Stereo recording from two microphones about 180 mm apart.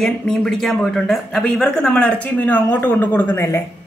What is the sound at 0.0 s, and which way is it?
Speech, 5° left (ahead or behind).